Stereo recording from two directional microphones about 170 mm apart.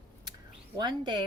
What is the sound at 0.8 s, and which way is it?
Speech, 25° right (ahead or behind).